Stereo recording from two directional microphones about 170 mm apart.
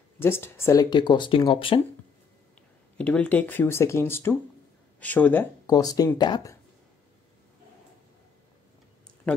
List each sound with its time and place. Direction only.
0.2 s speech: 15° left (ahead or behind); by 1.8 s 30° left (ahead or behind)
3.0 s speech: 10° left (ahead or behind)
5.7 s speech: 20° left (ahead or behind)